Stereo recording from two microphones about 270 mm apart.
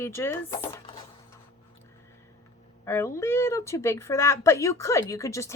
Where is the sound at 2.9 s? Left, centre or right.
Centre.